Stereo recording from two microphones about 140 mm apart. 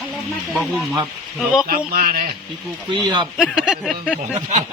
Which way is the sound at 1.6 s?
90° right.